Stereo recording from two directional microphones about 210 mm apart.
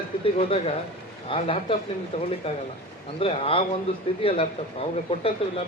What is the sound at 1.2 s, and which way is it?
Speech, 25° left (ahead or behind).